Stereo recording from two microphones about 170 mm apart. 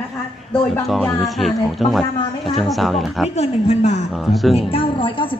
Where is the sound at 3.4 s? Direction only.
40° left (ahead or behind).